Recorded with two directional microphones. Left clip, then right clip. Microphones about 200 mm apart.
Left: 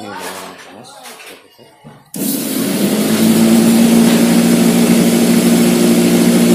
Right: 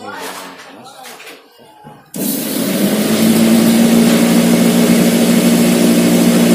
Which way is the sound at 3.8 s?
Centre (ahead or behind).